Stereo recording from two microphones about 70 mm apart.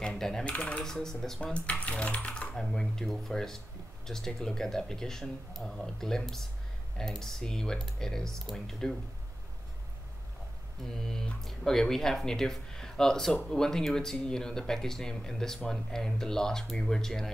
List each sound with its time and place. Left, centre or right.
0.0 s typing: centre
0.5 s speech: centre
0.8 s speech: centre
1.5 s speech: centre
11.1 s speech: centre